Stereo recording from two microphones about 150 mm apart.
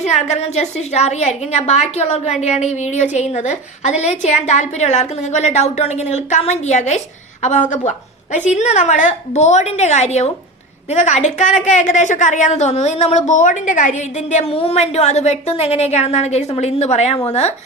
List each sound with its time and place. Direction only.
0.0 s a woman's voice: 50° left (ahead or behind)